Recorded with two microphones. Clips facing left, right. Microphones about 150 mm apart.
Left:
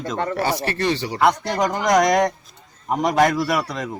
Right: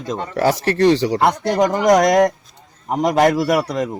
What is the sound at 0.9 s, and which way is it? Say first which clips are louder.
Speech: right 9 dB; 90° right.